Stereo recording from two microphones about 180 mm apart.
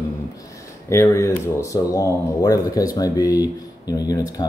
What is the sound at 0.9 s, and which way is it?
Speech, 15° left (ahead or behind).